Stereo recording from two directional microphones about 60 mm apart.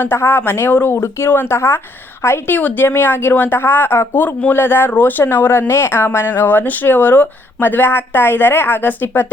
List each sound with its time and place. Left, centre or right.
0.0 s a woman's voice: left
2.6 s speech: left